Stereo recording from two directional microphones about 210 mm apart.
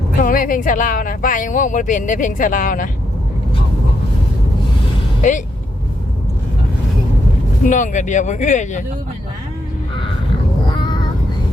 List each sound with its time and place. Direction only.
0.2 s speech: 40° left (ahead or behind)
7.6 s speech: 35° left (ahead or behind)
10.8 s a sound: 20° left (ahead or behind)